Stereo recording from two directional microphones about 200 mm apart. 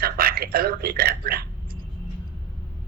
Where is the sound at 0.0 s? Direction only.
50° right (ahead or behind).